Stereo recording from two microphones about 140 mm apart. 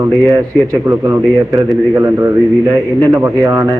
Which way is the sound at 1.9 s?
20° right (ahead or behind).